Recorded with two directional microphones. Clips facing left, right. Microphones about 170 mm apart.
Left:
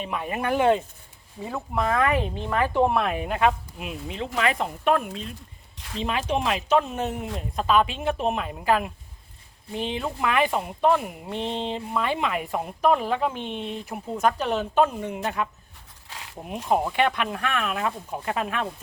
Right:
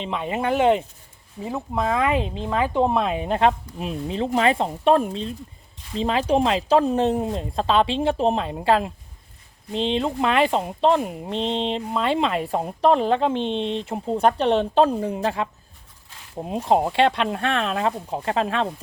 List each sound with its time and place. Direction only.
0.0 s speech: 25° right (ahead or behind)
16.0 s a sound: 85° left
16.4 s speech: 25° right (ahead or behind)